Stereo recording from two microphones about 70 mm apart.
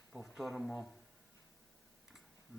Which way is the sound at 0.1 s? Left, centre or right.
Centre.